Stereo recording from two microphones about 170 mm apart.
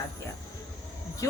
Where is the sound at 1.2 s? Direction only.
20° left (ahead or behind).